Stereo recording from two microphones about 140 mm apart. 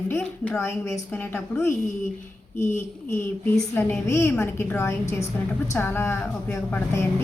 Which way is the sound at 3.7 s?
15° left (ahead or behind).